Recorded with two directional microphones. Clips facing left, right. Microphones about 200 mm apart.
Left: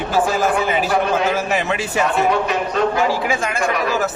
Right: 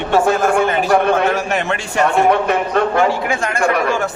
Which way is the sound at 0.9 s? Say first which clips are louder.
Right 6 dB; 60° right (ahead or behind).